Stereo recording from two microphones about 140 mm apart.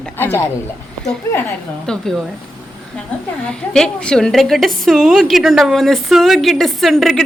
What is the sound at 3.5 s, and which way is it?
A woman's voice, 5° left (ahead or behind).